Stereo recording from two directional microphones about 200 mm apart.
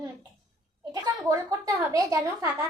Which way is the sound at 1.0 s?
20° right (ahead or behind).